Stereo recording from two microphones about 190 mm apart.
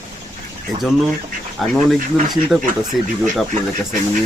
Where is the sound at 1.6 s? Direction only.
Centre (ahead or behind).